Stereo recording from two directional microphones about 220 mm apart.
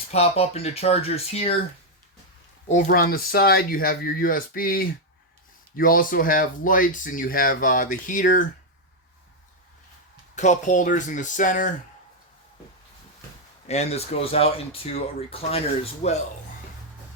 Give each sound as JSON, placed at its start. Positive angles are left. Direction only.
{"t": 0.1, "sound": "speech", "side_deg": 30}
{"t": 2.6, "sound": "speech", "side_deg": 35}
{"t": 10.3, "sound": "speech", "side_deg": 35}
{"t": 13.7, "sound": "speech", "side_deg": 30}